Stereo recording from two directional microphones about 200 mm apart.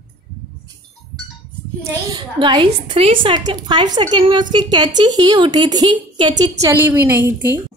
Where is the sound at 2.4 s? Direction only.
25° right (ahead or behind).